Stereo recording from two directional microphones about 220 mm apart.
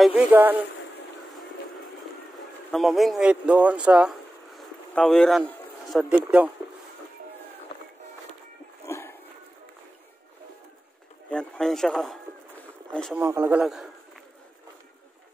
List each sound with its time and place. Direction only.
0.0 s speech: 5° right (ahead or behind)
2.7 s speech: centre (ahead or behind)
8.8 s a sound: 10° left (ahead or behind)
11.2 s speech: 5° left (ahead or behind)
13.1 s speech: 10° right (ahead or behind)